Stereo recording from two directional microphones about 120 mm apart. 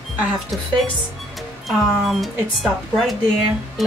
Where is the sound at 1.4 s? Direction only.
Centre (ahead or behind).